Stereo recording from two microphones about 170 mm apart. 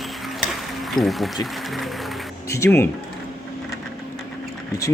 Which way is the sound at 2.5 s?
15° left (ahead or behind).